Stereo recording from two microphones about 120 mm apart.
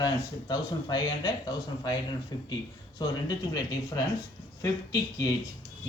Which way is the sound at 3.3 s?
35° left (ahead or behind).